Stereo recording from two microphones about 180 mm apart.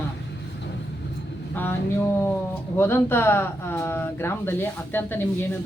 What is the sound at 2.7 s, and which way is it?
Speech, 15° left (ahead or behind).